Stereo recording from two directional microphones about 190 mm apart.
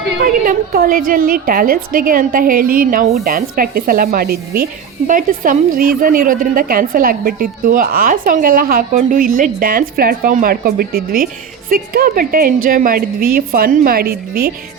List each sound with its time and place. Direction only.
0.3 s a woman's voice: 50° right (ahead or behind)